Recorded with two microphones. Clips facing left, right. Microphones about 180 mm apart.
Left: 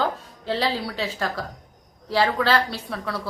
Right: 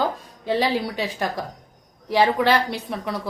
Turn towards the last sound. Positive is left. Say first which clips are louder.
# right 2 dB
turn(degrees=-20)  # may be behind; listen again after turning